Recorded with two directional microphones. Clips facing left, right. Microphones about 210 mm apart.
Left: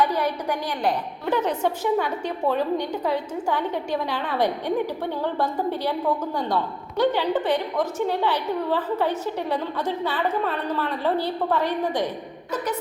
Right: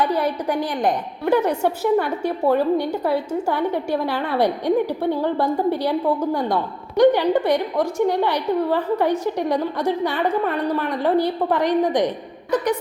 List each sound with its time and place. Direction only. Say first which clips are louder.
0.0 s a woman's voice: right 2 dB; 10° left (ahead or behind)
1.2 s a woman's voice: right 5 dB; 10° right (ahead or behind)